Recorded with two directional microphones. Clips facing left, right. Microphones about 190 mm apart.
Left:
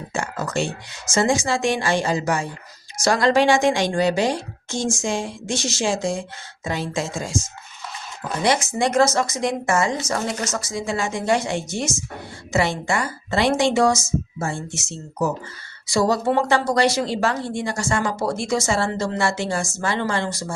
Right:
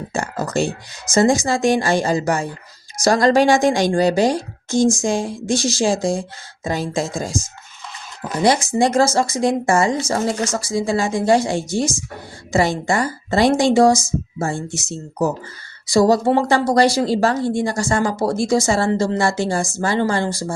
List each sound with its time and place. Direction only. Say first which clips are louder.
0.1 s speech: right 3 dB; 35° right (ahead or behind)
8.4 s speech: right 4 dB; 30° right (ahead or behind)